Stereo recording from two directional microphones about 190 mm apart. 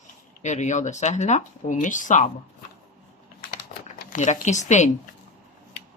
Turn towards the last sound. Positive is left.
turn(degrees=40)  # may be behind; listen again after turning